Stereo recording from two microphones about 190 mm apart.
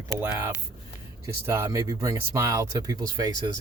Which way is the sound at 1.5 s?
15° right (ahead or behind).